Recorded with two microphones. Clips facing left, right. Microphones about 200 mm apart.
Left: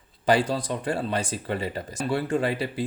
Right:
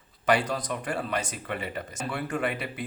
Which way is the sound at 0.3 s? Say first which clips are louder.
Left 3 dB; 30° left (ahead or behind).